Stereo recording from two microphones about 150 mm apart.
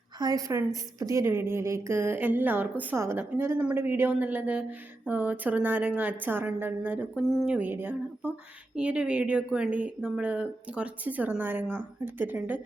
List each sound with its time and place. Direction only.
0.2 s speech: 25° right (ahead or behind)